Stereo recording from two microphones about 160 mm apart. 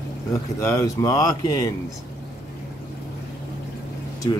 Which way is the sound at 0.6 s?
20° left (ahead or behind).